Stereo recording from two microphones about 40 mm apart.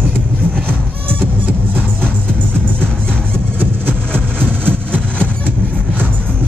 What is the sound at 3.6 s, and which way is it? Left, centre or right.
Music, right.